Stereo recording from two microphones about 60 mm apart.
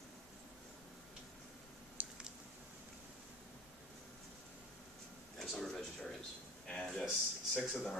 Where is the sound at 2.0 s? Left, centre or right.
Right.